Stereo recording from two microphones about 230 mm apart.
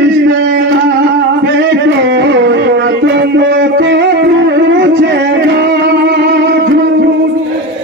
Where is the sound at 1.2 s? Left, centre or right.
Right.